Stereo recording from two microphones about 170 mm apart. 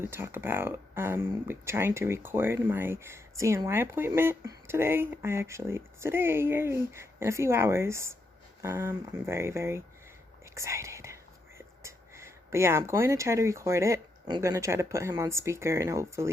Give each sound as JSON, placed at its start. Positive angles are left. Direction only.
{"t": 0.1, "sound": "speech", "side_deg": -15}